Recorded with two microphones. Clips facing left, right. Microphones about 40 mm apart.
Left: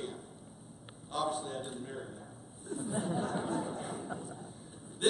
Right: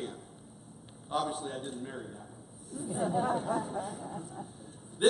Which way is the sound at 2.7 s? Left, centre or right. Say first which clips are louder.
Left 1 dB; left.